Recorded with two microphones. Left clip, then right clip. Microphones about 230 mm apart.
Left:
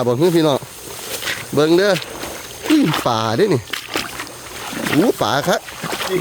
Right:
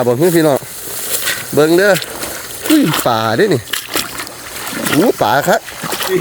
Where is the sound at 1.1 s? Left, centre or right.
Right.